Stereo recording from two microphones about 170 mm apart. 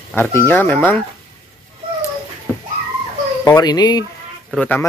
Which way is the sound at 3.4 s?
25° left (ahead or behind).